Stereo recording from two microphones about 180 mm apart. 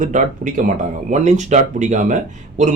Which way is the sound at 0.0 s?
45° right (ahead or behind).